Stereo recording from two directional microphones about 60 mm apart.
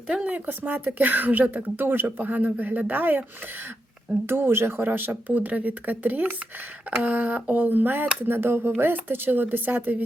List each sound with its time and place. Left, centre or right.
0.1 s a woman's voice: centre
0.3 s speech: right
4.3 s speech: right